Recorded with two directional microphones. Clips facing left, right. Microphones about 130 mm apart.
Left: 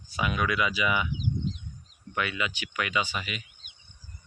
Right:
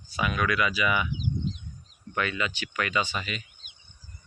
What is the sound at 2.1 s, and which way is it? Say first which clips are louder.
Speech: right 1 dB; 10° left (ahead or behind).